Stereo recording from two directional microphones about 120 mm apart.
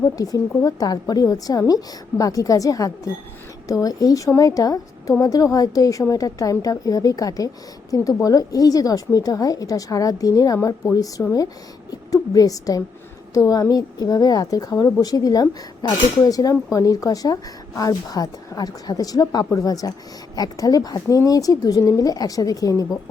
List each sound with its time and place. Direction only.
0.2 s a woman's voice: 30° left (ahead or behind)